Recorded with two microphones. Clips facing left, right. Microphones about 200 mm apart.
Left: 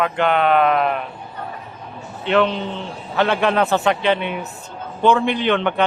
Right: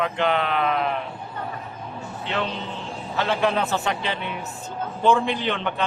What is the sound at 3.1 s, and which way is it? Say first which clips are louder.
A man's voice: left 5 dB; 65° left (ahead or behind).